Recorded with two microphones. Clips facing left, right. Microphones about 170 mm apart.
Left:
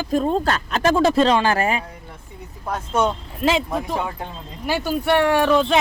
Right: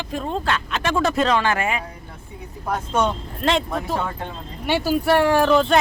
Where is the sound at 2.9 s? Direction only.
5° left (ahead or behind).